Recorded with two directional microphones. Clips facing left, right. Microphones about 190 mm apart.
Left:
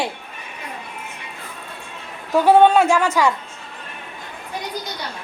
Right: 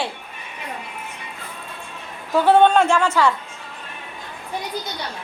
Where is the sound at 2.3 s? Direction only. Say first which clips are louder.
Left 2 dB; 10° left (ahead or behind).